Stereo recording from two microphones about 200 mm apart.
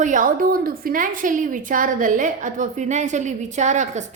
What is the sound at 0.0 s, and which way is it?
A woman's voice, 40° right (ahead or behind).